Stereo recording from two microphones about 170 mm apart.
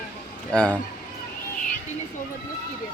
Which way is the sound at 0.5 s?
5° left (ahead or behind).